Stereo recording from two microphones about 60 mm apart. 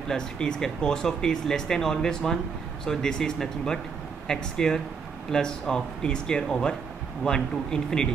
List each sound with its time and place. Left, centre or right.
0.1 s speech: centre